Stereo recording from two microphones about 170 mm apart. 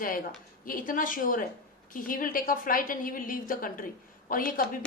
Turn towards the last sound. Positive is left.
turn(degrees=55)  # may be behind; listen again after turning